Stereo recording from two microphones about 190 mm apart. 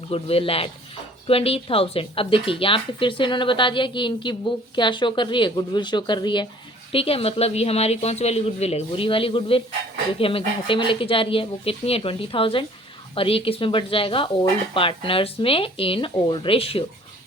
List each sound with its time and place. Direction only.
0.1 s a woman's voice: 30° left (ahead or behind)